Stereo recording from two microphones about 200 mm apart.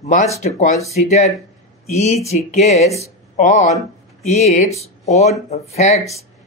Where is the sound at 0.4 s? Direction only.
35° left (ahead or behind).